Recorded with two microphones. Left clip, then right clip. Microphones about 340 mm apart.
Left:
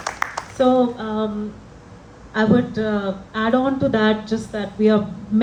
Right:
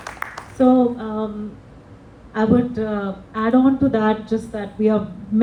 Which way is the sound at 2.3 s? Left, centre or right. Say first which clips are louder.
Even; left.